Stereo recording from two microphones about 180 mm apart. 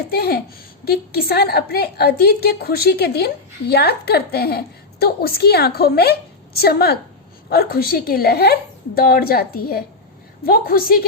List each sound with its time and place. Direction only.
0.1 s a woman's voice: 60° left (ahead or behind)